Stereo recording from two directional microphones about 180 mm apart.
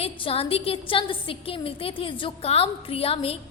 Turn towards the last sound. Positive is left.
turn(degrees=30)  # may be behind; listen again after turning